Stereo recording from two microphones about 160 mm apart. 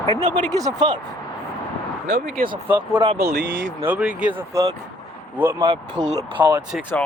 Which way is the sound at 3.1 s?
90° right.